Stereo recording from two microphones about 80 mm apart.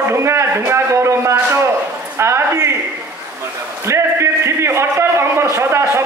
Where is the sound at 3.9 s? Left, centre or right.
Right.